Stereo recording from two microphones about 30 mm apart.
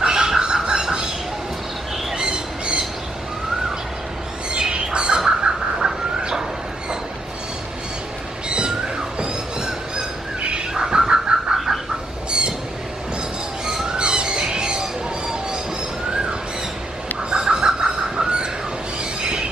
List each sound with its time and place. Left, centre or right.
0.0 s a sound: right
2.1 s squawk: right
4.6 s bird: right
8.5 s a sound: right
10.7 s bird: centre
11.5 s bird: centre
12.3 s squawk: right
13.9 s music: right
17.5 s chicken: right